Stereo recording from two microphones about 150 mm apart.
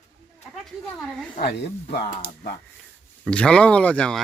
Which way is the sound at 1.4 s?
90° left.